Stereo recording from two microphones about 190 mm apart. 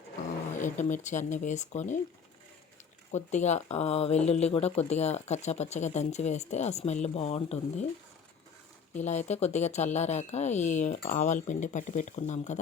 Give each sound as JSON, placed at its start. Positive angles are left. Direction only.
{"t": 0.6, "sound": "speech", "side_deg": 40}
{"t": 3.1, "sound": "speech", "side_deg": 35}
{"t": 8.9, "sound": "speech", "side_deg": 35}